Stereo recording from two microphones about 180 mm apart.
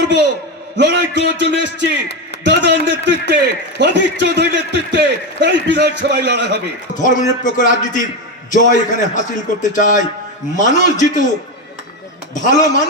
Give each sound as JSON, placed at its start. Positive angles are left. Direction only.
{"t": 0.8, "sound": "a man's voice", "side_deg": -75}
{"t": 6.9, "sound": "a man's voice", "side_deg": 45}
{"t": 12.3, "sound": "a man's voice", "side_deg": 45}